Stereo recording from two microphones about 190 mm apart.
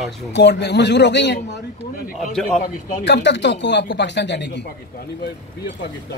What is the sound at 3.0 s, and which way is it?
Speech, 65° left (ahead or behind).